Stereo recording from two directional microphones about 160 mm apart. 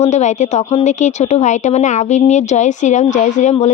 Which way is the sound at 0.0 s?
45° left (ahead or behind).